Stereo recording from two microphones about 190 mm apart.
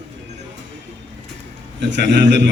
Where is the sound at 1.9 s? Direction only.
65° right (ahead or behind).